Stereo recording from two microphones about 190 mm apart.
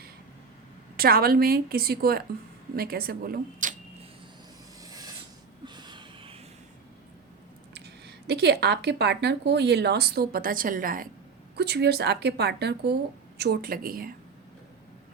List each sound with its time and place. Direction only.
0.9 s a woman's voice: 50° right (ahead or behind)
4.9 s filing: 20° right (ahead or behind)
5.6 s a sound: 25° right (ahead or behind)
7.7 s speech: 60° right (ahead or behind)
11.5 s a woman's voice: 60° right (ahead or behind)